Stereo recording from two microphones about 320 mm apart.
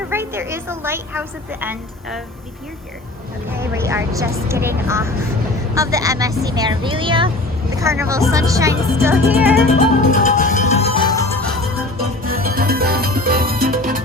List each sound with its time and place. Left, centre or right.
0.1 s a woman's voice: centre
3.5 s speech: centre
10.0 s music: left
12.2 s music: right